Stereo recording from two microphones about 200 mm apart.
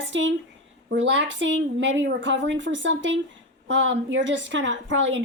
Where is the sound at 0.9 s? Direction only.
60° right (ahead or behind).